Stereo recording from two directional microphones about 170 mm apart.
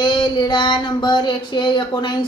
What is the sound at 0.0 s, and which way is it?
A woman's voice, 25° left (ahead or behind).